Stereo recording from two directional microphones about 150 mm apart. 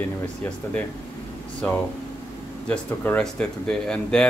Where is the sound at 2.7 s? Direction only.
10° left (ahead or behind).